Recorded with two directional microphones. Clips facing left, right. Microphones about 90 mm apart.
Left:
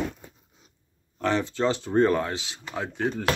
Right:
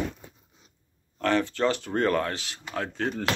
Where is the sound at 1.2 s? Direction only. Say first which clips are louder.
Even; 20° left (ahead or behind).